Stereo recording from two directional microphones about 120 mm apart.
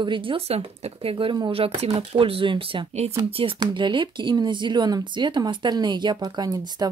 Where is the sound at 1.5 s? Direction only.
50° right (ahead or behind).